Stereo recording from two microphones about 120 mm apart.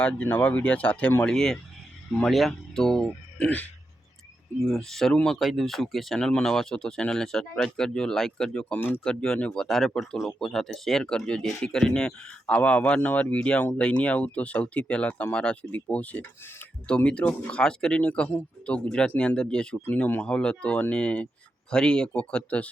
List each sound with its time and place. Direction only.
0.0 s speech: 10° left (ahead or behind)
9.2 s speech: 5° left (ahead or behind)